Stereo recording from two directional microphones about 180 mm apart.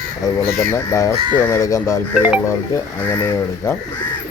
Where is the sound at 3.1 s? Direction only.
10° left (ahead or behind).